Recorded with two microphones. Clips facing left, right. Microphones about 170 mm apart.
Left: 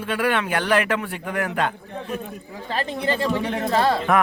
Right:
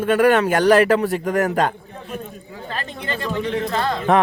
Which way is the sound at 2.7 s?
30° left (ahead or behind).